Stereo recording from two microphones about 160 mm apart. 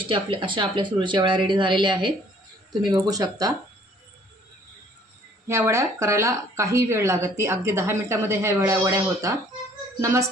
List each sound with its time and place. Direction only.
0.0 s speech: 30° right (ahead or behind)
5.5 s a woman's voice: 20° right (ahead or behind)